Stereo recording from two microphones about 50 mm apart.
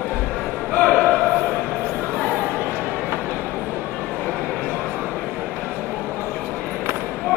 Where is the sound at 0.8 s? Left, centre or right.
Left.